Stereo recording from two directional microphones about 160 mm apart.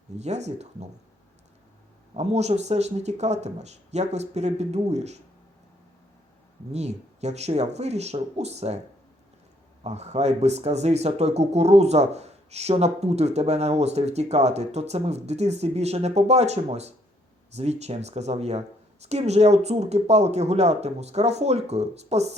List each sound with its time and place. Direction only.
0.2 s speech: 45° right (ahead or behind)
2.1 s speech: 45° right (ahead or behind)
6.7 s speech: 45° right (ahead or behind)
9.8 s speech: 45° right (ahead or behind)